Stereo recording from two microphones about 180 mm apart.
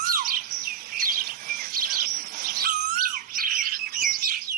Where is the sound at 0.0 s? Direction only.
50° right (ahead or behind).